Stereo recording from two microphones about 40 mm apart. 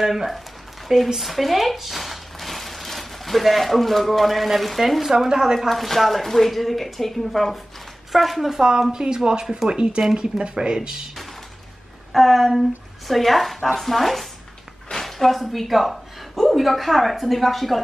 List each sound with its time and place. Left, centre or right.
0.0 s speech: centre
5.7 s speech: centre
12.1 s speech: centre